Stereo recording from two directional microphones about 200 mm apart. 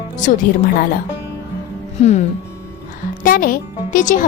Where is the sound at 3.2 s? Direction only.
45° left (ahead or behind).